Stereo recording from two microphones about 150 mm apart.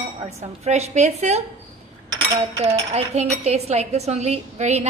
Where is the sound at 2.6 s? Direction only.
45° right (ahead or behind).